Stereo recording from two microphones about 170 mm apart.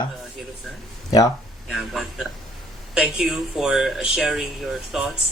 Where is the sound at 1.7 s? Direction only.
Centre (ahead or behind).